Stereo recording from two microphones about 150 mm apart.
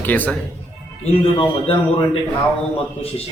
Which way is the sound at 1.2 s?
40° left (ahead or behind).